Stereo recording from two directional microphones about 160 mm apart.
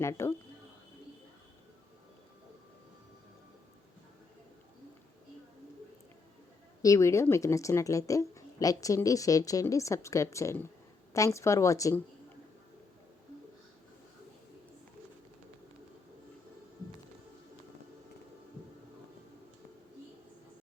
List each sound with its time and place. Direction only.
0.0 s speech: 15° left (ahead or behind)
6.8 s a woman's voice: 20° left (ahead or behind)